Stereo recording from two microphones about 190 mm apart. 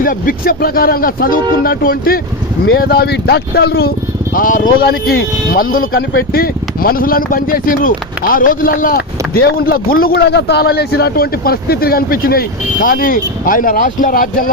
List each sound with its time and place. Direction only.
0.0 s speech: 45° left (ahead or behind)